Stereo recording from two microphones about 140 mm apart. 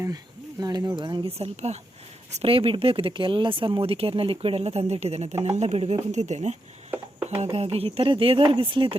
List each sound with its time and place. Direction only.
0.6 s speech: 25° right (ahead or behind)
1.4 s speech: 50° right (ahead or behind)